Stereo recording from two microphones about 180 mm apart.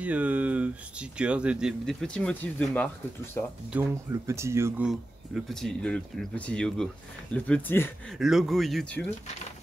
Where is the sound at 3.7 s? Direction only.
15° right (ahead or behind).